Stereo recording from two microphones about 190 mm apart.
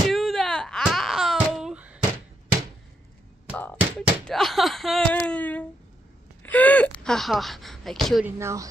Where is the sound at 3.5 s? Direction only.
10° left (ahead or behind).